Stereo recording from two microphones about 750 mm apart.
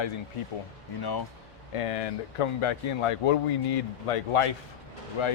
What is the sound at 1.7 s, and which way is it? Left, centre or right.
Speech, left.